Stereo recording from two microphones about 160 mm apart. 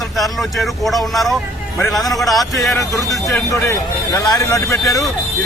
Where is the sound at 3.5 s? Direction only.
20° left (ahead or behind).